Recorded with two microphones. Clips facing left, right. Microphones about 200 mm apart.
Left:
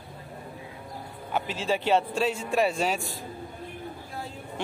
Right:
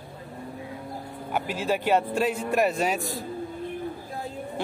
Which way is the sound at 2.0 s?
50° right (ahead or behind).